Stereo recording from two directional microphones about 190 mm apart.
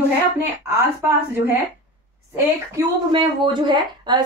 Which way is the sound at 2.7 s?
25° right (ahead or behind).